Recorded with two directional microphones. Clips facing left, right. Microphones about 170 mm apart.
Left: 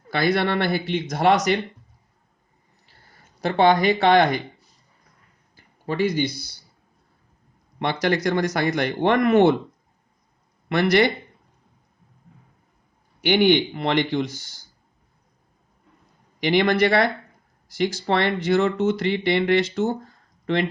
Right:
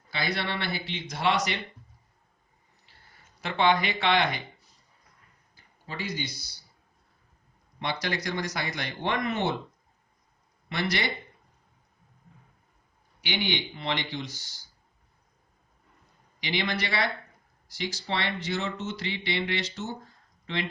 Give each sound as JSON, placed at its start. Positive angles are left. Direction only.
{"t": 0.1, "sound": "speech", "side_deg": 50}
{"t": 3.4, "sound": "speech", "side_deg": 40}
{"t": 5.8, "sound": "speech", "side_deg": 60}
{"t": 7.8, "sound": "speech", "side_deg": 55}
{"t": 10.7, "sound": "speech", "side_deg": 55}
{"t": 13.2, "sound": "speech", "side_deg": 55}
{"t": 16.4, "sound": "speech", "side_deg": 55}